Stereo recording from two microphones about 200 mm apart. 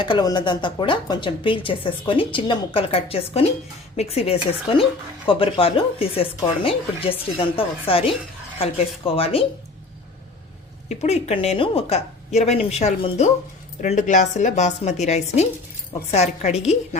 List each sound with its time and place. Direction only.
0.0 s a woman's voice: 20° left (ahead or behind)
10.8 s a woman's voice: 30° left (ahead or behind)